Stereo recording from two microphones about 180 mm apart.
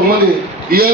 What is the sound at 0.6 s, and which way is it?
Speech, 55° right (ahead or behind).